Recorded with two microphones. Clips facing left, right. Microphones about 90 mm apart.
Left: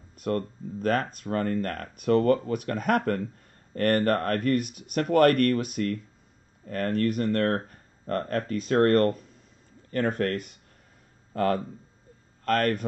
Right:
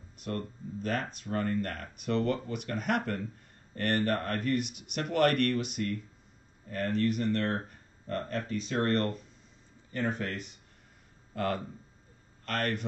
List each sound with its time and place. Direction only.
0.2 s speech: 45° left (ahead or behind)